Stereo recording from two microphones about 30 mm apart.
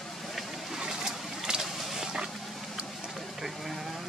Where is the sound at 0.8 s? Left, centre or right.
Right.